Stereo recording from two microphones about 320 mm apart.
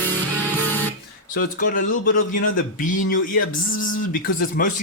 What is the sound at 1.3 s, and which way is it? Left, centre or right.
Speech, left.